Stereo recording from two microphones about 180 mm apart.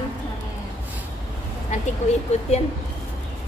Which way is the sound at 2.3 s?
40° left (ahead or behind).